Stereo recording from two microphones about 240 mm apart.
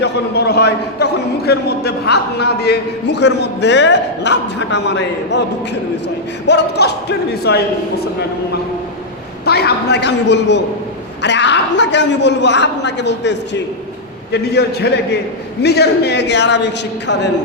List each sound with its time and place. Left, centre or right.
0.0 s a man's voice: left
6.5 s a man's voice: left
9.5 s a man's voice: left